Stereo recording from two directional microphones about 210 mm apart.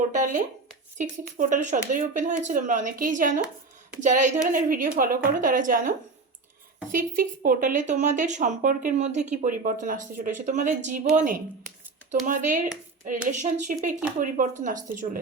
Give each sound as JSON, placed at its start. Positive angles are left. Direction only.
{"t": 0.1, "sound": "a woman's voice", "side_deg": -35}
{"t": 6.9, "sound": "a woman's voice", "side_deg": -40}